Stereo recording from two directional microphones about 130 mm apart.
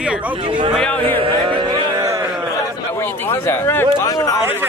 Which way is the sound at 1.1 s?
40° right (ahead or behind).